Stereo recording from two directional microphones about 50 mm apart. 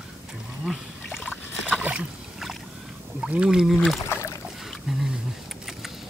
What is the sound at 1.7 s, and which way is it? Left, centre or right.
Rowboat, right.